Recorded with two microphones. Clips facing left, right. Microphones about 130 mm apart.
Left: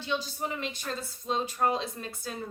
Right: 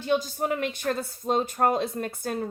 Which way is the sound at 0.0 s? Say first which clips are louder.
Right 7 dB; 45° right (ahead or behind).